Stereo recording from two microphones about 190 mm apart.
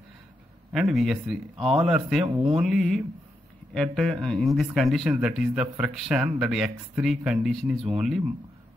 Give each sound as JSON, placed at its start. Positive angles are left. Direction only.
{"t": 0.7, "sound": "speech", "side_deg": 0}